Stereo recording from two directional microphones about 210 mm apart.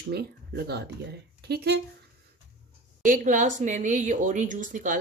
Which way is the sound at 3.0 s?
40° right (ahead or behind).